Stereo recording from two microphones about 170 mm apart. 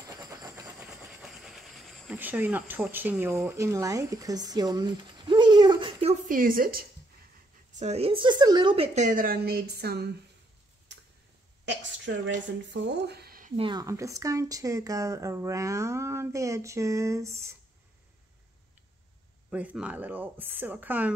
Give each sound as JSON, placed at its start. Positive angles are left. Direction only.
{"t": 0.0, "sound": "vehicle", "side_deg": -20}
{"t": 1.2, "sound": "a sound", "side_deg": 0}
{"t": 2.1, "sound": "speech", "side_deg": -10}
{"t": 6.2, "sound": "a woman's voice", "side_deg": -55}
{"t": 7.8, "sound": "a woman's voice", "side_deg": -35}
{"t": 11.6, "sound": "a sound", "side_deg": -90}
{"t": 12.6, "sound": "speech", "side_deg": -90}
{"t": 13.6, "sound": "speech", "side_deg": -25}
{"t": 19.5, "sound": "speech", "side_deg": -10}